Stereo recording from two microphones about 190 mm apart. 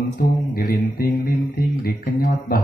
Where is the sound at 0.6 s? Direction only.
50° left (ahead or behind).